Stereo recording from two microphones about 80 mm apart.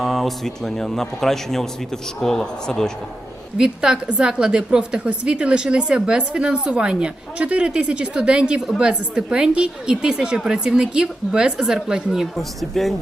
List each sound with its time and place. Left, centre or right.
0.0 s a man's voice: centre
3.6 s a woman's voice: centre